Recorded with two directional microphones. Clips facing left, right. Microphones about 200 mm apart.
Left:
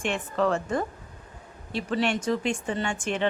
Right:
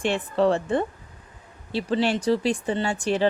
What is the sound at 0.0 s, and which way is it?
Speech, 35° right (ahead or behind).